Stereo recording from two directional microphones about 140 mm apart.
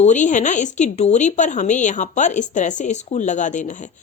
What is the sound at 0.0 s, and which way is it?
Speech, 60° left (ahead or behind).